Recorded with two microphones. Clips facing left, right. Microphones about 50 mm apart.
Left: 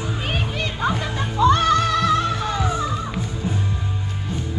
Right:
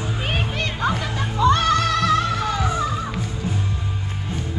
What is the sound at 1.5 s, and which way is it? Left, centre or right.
Music, right.